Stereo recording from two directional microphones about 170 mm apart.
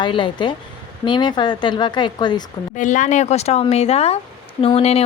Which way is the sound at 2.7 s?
50° left (ahead or behind).